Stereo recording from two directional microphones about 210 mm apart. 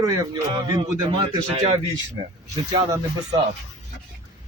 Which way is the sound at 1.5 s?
30° right (ahead or behind).